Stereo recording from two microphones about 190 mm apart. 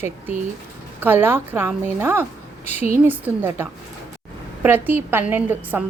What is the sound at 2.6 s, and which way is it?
Speech, 35° left (ahead or behind).